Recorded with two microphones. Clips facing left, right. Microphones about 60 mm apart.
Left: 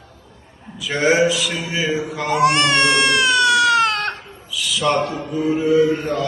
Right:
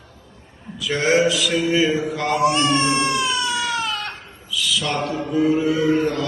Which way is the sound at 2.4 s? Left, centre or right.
Left.